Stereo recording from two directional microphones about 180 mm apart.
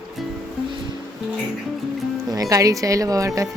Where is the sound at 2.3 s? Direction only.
20° right (ahead or behind).